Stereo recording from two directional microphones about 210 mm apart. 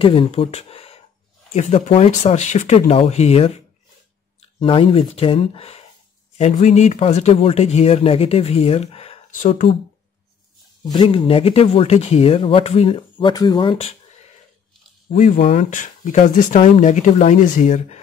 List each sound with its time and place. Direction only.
0.0 s a man's voice: 25° left (ahead or behind)
10.9 s a man's voice: 20° left (ahead or behind)
15.0 s speech: 35° left (ahead or behind)